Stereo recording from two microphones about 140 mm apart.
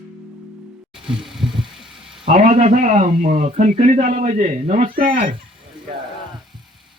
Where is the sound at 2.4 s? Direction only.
65° right (ahead or behind).